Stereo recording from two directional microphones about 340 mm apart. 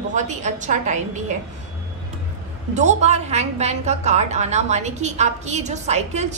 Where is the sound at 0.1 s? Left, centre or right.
Right.